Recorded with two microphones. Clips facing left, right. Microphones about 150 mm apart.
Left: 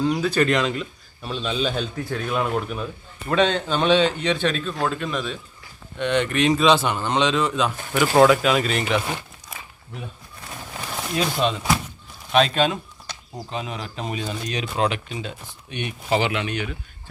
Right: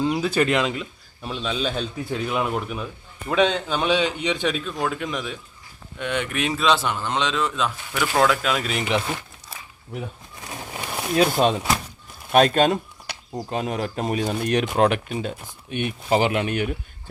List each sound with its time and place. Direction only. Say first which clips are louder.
0.1 s a man's voice: left 1 dB; 5° right (ahead or behind)
1.4 s speech: left 1 dB; centre (ahead or behind)
2.0 s a man's voice: right 1 dB; 15° right (ahead or behind)
10.4 s a sound: right 2 dB; 15° right (ahead or behind)
11.2 s speech: right 4 dB; 45° right (ahead or behind)